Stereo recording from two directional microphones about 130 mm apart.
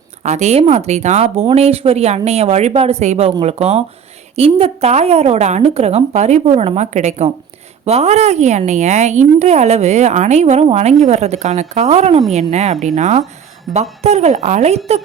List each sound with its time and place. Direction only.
0.2 s a woman's voice: 60° right (ahead or behind)
13.7 s speech: centre (ahead or behind)
14.0 s a woman's voice: 60° right (ahead or behind)